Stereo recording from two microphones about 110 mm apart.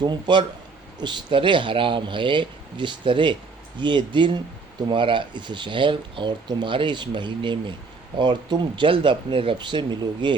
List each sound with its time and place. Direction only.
0.0 s speech: 45° right (ahead or behind)